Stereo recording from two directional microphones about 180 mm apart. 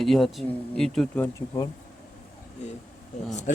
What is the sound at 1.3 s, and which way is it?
Bee, 20° left (ahead or behind).